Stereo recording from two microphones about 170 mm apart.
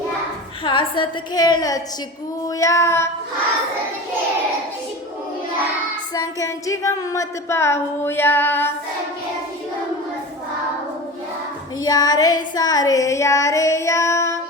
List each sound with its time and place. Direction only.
0.6 s child singing: 30° left (ahead or behind)
2.6 s speech: 20° left (ahead or behind)
6.1 s speech: 20° left (ahead or behind)
11.8 s child singing: 20° left (ahead or behind)